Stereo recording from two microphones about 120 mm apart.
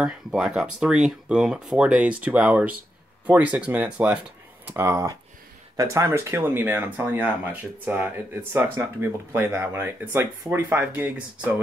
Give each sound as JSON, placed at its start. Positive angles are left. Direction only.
{"t": 0.0, "sound": "speech", "side_deg": -5}